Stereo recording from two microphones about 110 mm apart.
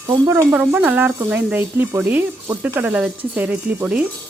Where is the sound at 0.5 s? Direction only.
10° right (ahead or behind).